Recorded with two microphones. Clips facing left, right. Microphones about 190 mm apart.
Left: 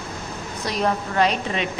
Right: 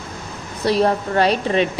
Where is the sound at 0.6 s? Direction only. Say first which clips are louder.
Right 7 dB; 35° right (ahead or behind).